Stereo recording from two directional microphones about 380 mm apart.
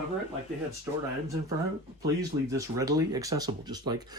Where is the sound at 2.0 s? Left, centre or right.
Centre.